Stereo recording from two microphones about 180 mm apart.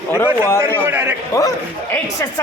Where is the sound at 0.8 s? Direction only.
15° right (ahead or behind).